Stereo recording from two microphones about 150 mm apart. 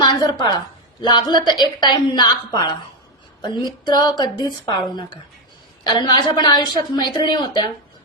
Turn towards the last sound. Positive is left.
turn(degrees=30)  # may be behind; listen again after turning